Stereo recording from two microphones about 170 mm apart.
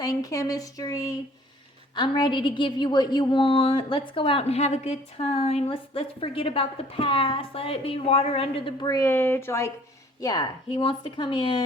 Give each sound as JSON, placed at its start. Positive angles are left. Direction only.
{"t": 0.0, "sound": "a woman's voice", "side_deg": 20}